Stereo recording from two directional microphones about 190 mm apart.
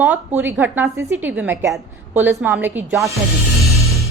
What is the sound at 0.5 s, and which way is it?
A woman's voice, 10° right (ahead or behind).